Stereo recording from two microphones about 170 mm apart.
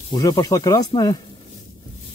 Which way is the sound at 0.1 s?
20° left (ahead or behind).